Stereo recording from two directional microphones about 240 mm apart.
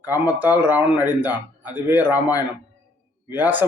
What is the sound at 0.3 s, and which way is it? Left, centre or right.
Speech, centre.